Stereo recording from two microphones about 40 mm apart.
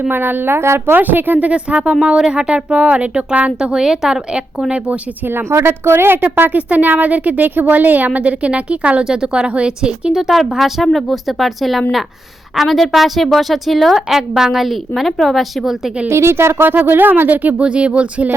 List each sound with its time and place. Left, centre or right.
0.1 s speech: right
0.5 s a woman's voice: right
0.9 s speech: right
1.5 s speech: right
3.6 s a woman's voice: centre
5.3 s speech: right
6.3 s speech: right
6.6 s a woman's voice: right
9.0 s speech: centre
10.2 s a woman's voice: centre
14.1 s a woman's voice: centre
16.0 s a woman's voice: right
16.8 s speech: right
17.6 s speech: right